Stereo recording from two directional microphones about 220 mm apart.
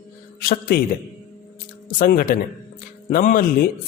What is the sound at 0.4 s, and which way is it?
Speech, 40° left (ahead or behind).